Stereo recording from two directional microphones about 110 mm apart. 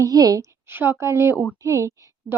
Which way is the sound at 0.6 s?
20° right (ahead or behind).